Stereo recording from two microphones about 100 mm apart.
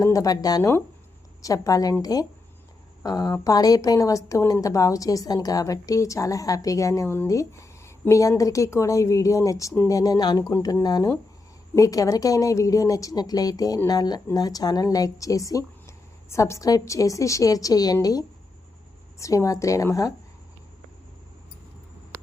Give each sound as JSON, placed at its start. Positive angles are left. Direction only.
{"t": 0.0, "sound": "a woman's voice", "side_deg": 35}